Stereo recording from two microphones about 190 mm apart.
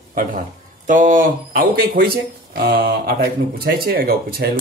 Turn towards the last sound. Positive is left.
turn(degrees=-55)  # may be behind; listen again after turning